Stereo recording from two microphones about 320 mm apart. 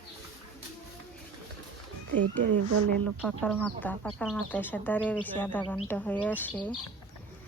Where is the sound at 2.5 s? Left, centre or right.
Right.